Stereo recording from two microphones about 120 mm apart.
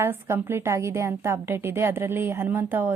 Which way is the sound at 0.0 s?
20° right (ahead or behind).